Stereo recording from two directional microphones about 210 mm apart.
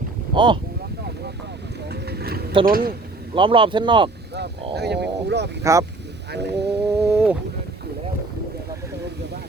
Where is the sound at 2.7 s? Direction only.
45° right (ahead or behind).